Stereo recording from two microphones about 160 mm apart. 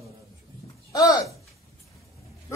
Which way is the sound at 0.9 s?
20° left (ahead or behind).